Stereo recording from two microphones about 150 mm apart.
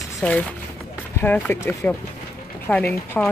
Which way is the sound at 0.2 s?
5° left (ahead or behind).